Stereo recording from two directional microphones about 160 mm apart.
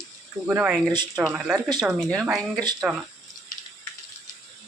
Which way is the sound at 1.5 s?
20° right (ahead or behind).